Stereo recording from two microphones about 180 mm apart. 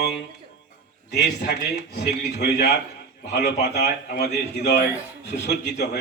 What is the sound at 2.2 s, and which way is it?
A man's voice, 65° left (ahead or behind).